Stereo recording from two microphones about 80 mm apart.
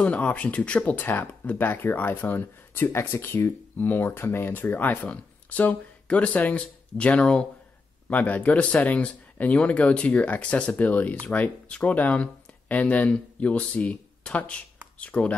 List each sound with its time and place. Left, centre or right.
0.0 s speech: centre